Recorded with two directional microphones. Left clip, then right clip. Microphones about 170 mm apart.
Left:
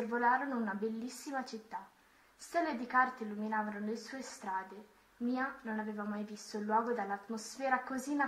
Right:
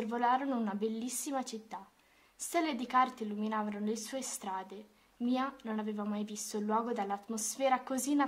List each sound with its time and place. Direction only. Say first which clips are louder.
0.1 s a woman's voice: right 1 dB; 40° right (ahead or behind)